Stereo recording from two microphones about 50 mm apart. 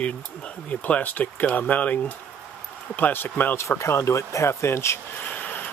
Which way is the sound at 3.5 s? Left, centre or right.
Left.